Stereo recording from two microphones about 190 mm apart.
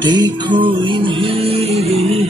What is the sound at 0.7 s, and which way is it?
Music, 25° right (ahead or behind).